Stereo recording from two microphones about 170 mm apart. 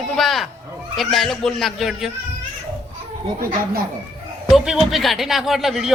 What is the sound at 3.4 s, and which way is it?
Speech, 55° right (ahead or behind).